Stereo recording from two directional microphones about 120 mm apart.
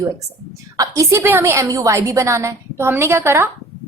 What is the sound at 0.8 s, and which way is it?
A woman's voice, 25° right (ahead or behind).